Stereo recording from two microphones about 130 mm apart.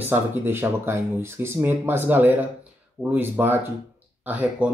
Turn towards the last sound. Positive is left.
turn(degrees=-10)  # may be behind; listen again after turning